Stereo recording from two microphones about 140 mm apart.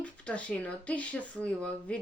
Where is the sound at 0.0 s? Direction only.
10° left (ahead or behind).